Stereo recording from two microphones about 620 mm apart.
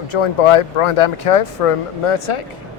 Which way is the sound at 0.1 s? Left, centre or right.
Left.